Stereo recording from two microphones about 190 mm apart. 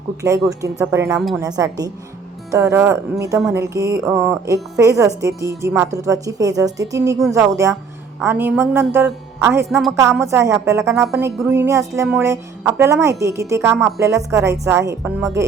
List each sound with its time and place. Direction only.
0.6 s a woman's voice: 15° right (ahead or behind)
9.6 s a woman's voice: centre (ahead or behind)
9.9 s a woman's voice: 15° right (ahead or behind)